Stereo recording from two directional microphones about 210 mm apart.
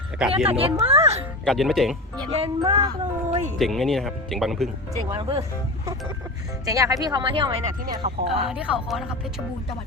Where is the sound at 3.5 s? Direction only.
Centre (ahead or behind).